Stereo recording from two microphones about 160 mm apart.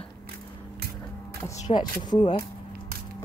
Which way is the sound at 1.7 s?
30° left (ahead or behind).